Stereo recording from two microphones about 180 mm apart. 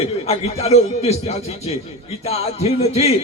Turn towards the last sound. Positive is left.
turn(degrees=35)  # may be behind; listen again after turning